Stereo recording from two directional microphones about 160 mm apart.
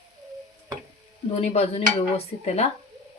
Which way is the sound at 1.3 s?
40° left (ahead or behind).